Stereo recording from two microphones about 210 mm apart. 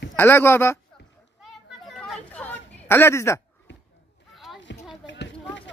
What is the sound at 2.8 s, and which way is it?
Speech, 10° left (ahead or behind).